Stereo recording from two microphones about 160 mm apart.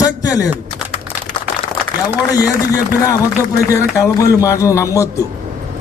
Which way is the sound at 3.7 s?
20° left (ahead or behind).